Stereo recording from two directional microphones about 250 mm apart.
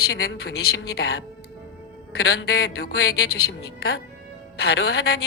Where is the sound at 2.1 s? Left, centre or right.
Left.